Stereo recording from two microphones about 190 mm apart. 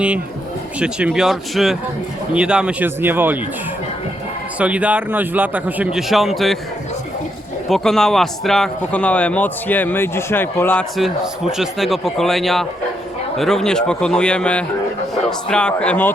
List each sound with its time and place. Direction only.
0.8 s a man's voice: 5° right (ahead or behind)
4.5 s a man's voice: 5° right (ahead or behind)
7.7 s a man's voice: centre (ahead or behind)